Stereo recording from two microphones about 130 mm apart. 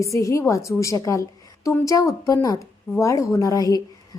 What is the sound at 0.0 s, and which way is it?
A woman's voice, 25° left (ahead or behind).